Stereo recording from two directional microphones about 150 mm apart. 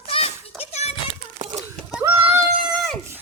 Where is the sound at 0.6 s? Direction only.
45° left (ahead or behind).